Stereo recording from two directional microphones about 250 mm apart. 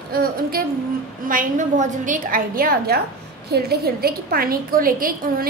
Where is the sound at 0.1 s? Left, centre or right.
Right.